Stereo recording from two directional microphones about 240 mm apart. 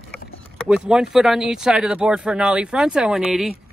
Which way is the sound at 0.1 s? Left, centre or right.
Centre.